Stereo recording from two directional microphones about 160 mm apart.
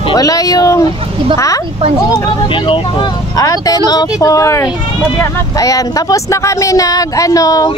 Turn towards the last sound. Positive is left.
turn(degrees=20)  # may be behind; listen again after turning